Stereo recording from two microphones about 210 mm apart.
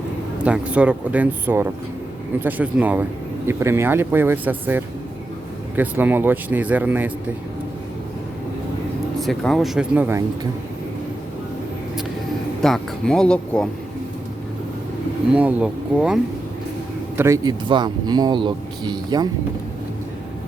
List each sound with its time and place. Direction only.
0.4 s speech: 5° right (ahead or behind)
9.2 s speech: centre (ahead or behind)
12.6 s speech: centre (ahead or behind)
15.3 s speech: 5° right (ahead or behind)
17.2 s speech: 15° right (ahead or behind)